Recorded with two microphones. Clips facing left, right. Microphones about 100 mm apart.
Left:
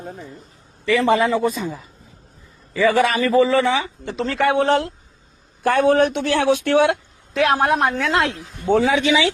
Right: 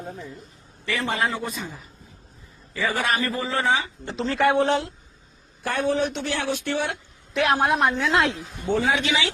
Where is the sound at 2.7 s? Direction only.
90° left.